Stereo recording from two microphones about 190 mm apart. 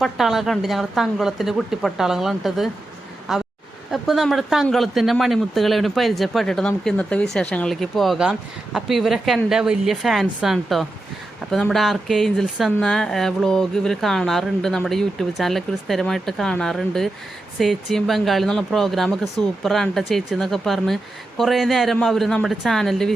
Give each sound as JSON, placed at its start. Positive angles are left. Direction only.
{"t": 0.0, "sound": "speech", "side_deg": 0}